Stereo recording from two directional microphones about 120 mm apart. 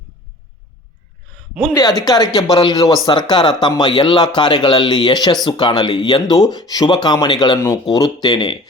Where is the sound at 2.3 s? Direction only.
40° left (ahead or behind).